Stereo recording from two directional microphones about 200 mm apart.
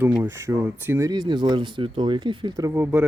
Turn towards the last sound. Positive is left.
turn(degrees=-10)  # may be behind; listen again after turning